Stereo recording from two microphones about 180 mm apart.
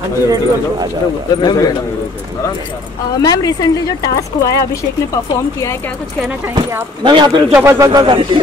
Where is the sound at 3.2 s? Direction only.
20° left (ahead or behind).